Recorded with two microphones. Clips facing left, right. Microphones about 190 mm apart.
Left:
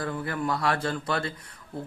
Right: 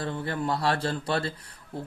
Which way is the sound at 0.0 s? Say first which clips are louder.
Even; 25° right (ahead or behind).